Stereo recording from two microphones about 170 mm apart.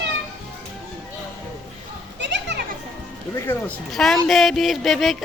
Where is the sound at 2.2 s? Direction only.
90° right.